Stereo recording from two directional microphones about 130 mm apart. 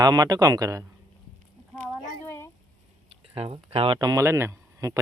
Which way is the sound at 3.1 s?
50° right (ahead or behind).